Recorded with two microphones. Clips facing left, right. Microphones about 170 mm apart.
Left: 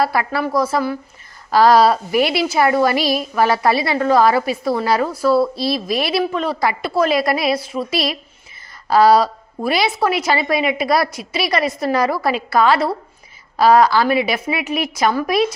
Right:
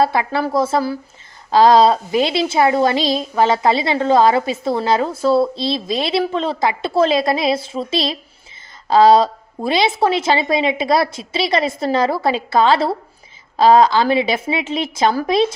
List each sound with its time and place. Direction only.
0.0 s a woman's voice: 25° right (ahead or behind)